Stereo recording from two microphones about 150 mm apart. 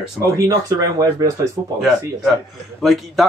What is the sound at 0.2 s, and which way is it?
Speech, 20° right (ahead or behind).